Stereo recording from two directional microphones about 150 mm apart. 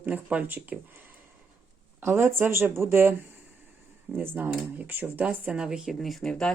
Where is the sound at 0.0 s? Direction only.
10° right (ahead or behind).